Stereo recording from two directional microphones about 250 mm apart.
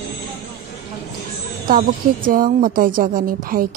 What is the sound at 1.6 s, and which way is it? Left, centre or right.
A woman's voice, right.